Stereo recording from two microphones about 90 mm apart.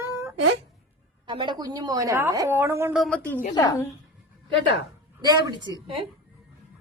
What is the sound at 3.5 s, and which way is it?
Speech, 45° left (ahead or behind).